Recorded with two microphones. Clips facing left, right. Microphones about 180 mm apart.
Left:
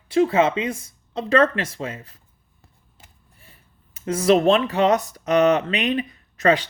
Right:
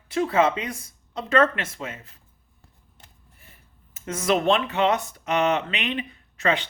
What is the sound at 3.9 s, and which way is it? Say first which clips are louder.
Speech: left 6 dB; 30° left (ahead or behind).